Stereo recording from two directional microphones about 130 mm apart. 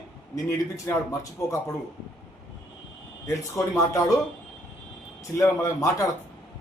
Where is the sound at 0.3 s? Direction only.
20° left (ahead or behind).